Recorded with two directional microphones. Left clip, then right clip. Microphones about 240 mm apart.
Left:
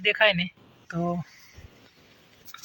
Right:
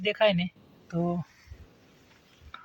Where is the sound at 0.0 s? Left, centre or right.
Centre.